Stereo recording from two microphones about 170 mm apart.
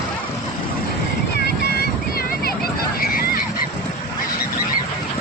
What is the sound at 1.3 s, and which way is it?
Vehicle, 70° left (ahead or behind).